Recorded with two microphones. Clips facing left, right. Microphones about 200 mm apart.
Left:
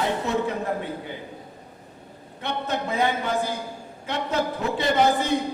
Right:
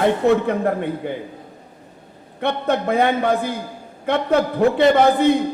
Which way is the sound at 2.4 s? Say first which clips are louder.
Right 8 dB; 60° right (ahead or behind).